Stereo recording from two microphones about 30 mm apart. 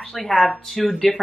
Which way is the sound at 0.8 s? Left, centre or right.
Left.